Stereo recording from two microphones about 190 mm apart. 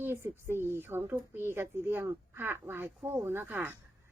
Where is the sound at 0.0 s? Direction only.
15° right (ahead or behind).